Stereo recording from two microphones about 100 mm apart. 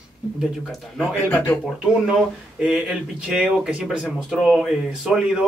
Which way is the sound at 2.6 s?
5° right (ahead or behind).